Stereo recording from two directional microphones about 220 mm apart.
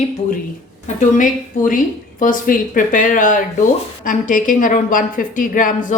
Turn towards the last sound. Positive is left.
turn(degrees=35)  # may be behind; listen again after turning